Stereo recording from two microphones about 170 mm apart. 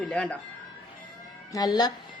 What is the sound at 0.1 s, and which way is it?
Speech, 5° left (ahead or behind).